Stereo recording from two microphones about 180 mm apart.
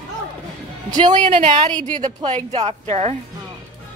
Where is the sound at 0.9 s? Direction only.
25° right (ahead or behind).